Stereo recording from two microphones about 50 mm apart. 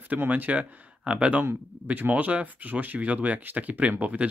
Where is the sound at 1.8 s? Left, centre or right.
Right.